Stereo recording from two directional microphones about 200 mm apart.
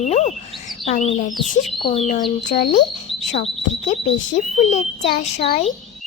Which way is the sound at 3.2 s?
35° left (ahead or behind).